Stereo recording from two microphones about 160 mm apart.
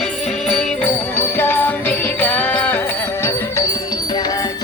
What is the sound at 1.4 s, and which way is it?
Music, 10° left (ahead or behind).